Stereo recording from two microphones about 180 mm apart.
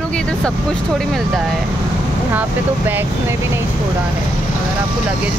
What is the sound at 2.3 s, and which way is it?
Speech, 10° right (ahead or behind).